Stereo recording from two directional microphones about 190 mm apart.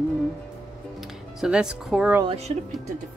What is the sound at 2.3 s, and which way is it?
Speech, 35° right (ahead or behind).